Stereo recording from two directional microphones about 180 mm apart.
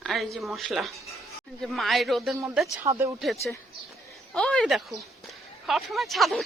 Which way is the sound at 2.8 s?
15° right (ahead or behind).